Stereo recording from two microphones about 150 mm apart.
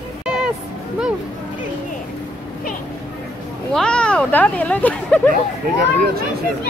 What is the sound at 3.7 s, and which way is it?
Speech, 5° left (ahead or behind).